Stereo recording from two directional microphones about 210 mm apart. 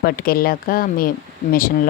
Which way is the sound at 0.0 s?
45° left (ahead or behind).